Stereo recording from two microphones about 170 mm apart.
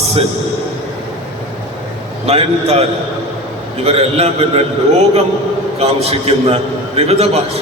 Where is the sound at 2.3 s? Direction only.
35° right (ahead or behind).